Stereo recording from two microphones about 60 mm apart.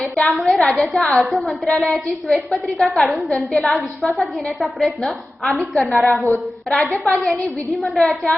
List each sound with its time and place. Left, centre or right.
0.3 s a woman's voice: centre